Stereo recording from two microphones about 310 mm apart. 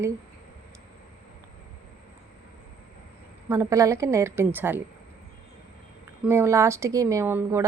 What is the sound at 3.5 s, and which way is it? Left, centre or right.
Speech, centre.